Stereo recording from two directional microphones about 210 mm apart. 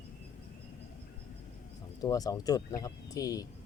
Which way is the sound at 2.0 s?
15° left (ahead or behind).